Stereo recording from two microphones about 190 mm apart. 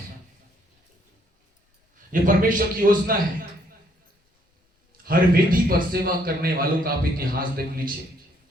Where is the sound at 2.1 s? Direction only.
45° right (ahead or behind).